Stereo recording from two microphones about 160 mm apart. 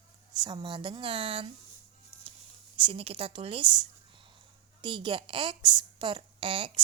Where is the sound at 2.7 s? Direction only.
35° right (ahead or behind).